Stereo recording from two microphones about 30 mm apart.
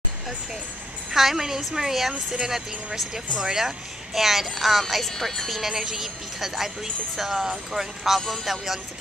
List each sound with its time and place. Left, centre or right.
1.1 s a woman's voice: centre
4.8 s speech: centre
5.6 s a woman's voice: centre